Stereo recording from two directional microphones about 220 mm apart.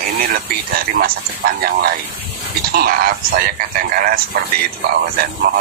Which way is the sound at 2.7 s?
45° right (ahead or behind).